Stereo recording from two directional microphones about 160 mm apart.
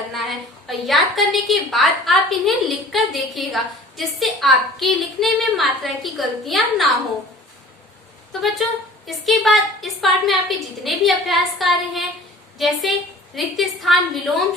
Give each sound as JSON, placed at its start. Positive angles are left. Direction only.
{"t": 0.1, "sound": "a woman's voice", "side_deg": 0}
{"t": 8.3, "sound": "a woman's voice", "side_deg": 0}